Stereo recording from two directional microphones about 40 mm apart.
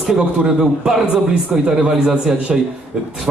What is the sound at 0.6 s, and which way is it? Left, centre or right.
A man's voice, centre.